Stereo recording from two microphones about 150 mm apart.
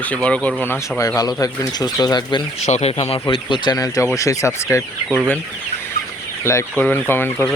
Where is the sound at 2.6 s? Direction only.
45° left (ahead or behind); by 4.8 s 20° left (ahead or behind).